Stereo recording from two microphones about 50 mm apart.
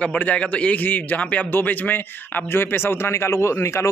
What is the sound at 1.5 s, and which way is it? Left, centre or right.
Speech, left.